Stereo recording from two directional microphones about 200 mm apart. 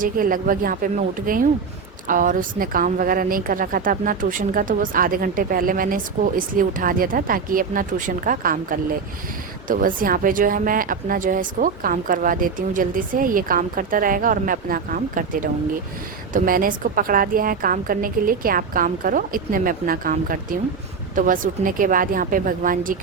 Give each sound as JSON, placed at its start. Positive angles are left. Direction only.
{"t": 0.0, "sound": "a woman's voice", "side_deg": -45}